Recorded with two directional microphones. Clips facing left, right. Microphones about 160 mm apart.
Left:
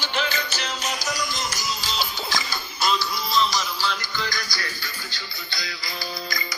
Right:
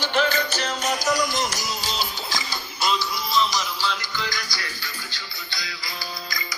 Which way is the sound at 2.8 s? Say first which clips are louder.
Even; 15° right (ahead or behind).